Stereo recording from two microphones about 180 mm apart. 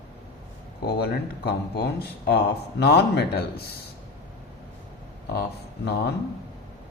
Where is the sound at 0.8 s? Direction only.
60° left (ahead or behind).